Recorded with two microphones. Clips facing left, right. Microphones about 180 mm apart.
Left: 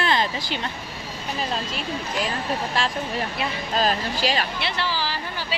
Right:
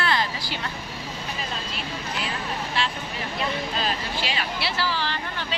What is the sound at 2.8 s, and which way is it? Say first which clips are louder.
Speech: left 4 dB; 45° left (ahead or behind).